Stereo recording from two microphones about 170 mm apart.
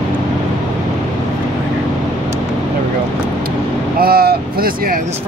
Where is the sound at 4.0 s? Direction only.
60° right (ahead or behind).